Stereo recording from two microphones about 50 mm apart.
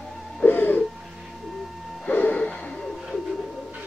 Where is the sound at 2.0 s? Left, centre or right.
Left.